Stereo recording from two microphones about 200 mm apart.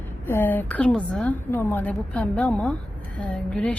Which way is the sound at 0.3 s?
10° left (ahead or behind).